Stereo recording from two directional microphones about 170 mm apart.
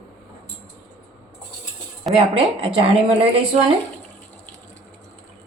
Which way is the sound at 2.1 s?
35° right (ahead or behind).